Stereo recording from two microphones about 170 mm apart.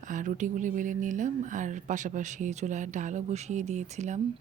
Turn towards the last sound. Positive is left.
turn(degrees=-45)  # may be behind; listen again after turning